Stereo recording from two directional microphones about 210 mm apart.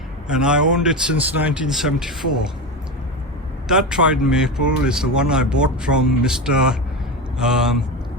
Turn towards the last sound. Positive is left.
turn(degrees=0)  # may be behind; listen again after turning